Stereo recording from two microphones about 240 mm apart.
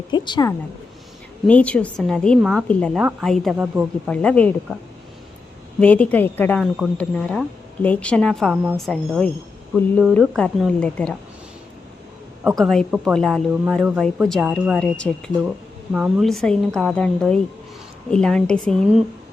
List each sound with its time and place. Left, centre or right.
0.1 s a woman's voice: centre
1.5 s speech: centre
4.1 s speech: centre
5.8 s speech: centre
12.5 s speech: centre